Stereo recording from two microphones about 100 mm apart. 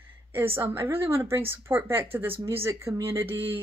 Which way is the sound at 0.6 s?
25° right (ahead or behind).